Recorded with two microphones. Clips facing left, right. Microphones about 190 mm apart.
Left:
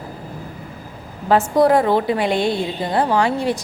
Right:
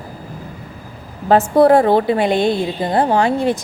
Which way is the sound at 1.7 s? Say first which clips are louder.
Right 4 dB; 30° right (ahead or behind).